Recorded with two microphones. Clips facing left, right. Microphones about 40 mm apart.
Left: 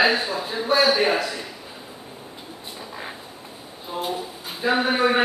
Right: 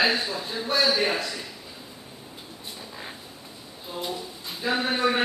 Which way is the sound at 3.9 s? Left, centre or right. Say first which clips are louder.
Left 5 dB; left.